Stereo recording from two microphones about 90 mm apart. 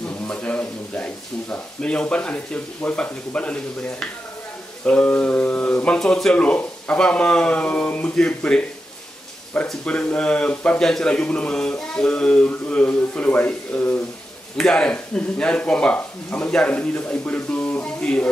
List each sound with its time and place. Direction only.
0.1 s speech: 15° left (ahead or behind)
4.8 s speech: 15° left (ahead or behind)